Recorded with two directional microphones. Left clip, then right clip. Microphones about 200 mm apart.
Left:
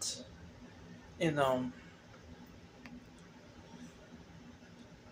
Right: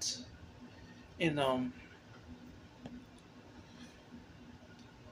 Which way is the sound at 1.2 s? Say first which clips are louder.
Left 1 dB; 5° right (ahead or behind).